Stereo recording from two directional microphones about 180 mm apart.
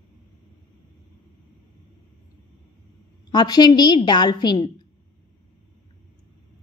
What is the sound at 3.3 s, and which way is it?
A woman's voice, 25° left (ahead or behind).